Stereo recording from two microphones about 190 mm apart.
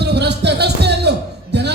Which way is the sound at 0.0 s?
60° right (ahead or behind).